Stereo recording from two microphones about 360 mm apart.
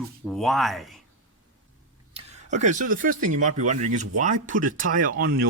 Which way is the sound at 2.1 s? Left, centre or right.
Centre.